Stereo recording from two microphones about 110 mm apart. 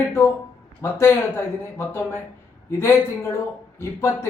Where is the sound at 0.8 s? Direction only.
25° left (ahead or behind).